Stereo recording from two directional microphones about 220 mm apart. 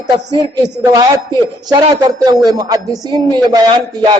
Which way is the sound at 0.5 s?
20° right (ahead or behind).